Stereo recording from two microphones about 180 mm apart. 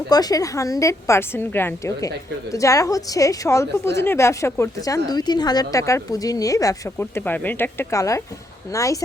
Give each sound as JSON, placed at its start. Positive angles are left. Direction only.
{"t": 0.1, "sound": "a woman's voice", "side_deg": 20}